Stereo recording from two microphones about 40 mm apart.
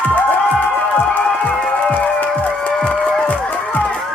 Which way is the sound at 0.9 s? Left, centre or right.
Left.